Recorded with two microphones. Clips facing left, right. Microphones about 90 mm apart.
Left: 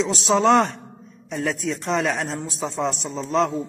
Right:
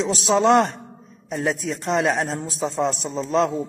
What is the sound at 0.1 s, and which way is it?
Speech, 50° left (ahead or behind).